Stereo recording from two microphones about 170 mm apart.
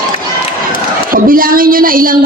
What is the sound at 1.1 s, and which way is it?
A man's voice, 55° right (ahead or behind).